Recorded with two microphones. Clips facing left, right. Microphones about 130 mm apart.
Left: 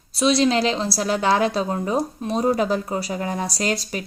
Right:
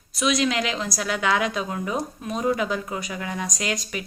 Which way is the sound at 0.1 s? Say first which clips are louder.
Left 5 dB; 30° left (ahead or behind).